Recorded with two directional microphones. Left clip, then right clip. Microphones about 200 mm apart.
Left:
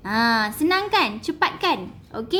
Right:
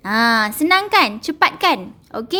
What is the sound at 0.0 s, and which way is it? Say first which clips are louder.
A woman's voice: right 5 dB; 35° right (ahead or behind).